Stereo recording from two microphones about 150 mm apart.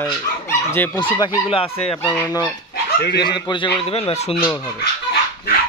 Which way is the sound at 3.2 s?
30° left (ahead or behind).